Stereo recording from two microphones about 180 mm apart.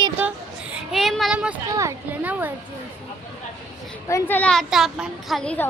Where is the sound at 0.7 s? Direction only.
Centre (ahead or behind).